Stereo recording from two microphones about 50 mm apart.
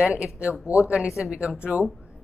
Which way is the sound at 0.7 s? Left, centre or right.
Right.